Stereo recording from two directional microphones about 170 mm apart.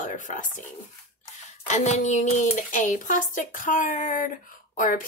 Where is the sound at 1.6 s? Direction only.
45° left (ahead or behind).